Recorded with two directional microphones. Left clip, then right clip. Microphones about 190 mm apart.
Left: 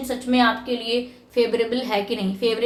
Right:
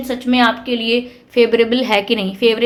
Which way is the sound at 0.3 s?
40° right (ahead or behind).